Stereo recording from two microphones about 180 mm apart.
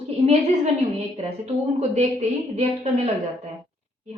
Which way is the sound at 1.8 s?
40° right (ahead or behind).